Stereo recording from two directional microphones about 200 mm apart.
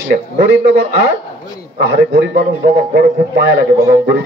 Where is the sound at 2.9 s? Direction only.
55° right (ahead or behind).